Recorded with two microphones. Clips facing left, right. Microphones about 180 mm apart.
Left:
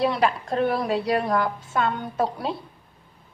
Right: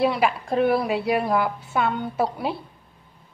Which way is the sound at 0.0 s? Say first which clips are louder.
Right 1 dB; 10° right (ahead or behind).